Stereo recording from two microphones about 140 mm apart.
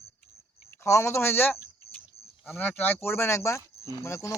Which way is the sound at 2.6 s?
10° left (ahead or behind).